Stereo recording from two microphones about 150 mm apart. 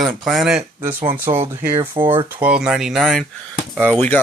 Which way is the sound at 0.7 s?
15° right (ahead or behind).